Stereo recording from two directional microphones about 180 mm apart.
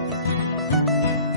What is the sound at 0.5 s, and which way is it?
Music, centre (ahead or behind).